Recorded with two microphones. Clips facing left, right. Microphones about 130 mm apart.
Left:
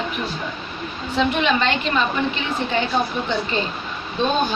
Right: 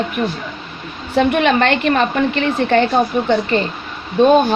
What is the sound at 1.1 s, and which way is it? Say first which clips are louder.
A woman's voice: right 6 dB; 55° right (ahead or behind).